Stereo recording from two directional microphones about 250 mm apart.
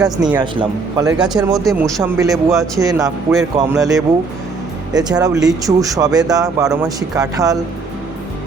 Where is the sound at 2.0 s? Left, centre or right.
Centre.